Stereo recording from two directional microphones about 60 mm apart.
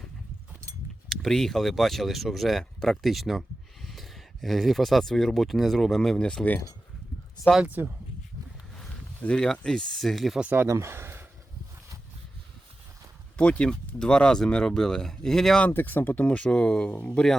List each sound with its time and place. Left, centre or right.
1.1 s speech: centre
7.8 s speech: right
9.2 s speech: centre
10.7 s a sound: right
13.3 s speech: centre
15.7 s speech: left; by 17.3 s centre